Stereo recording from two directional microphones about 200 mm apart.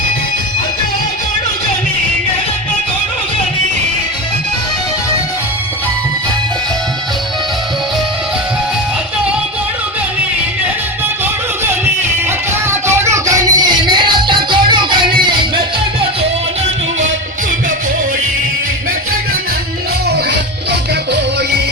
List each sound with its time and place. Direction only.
12.9 s music: 15° right (ahead or behind)